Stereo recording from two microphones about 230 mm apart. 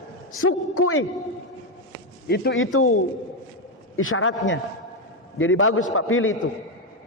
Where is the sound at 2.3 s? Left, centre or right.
Left.